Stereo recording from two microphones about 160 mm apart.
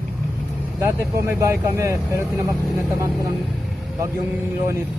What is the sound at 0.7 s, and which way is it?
Speech, 15° right (ahead or behind).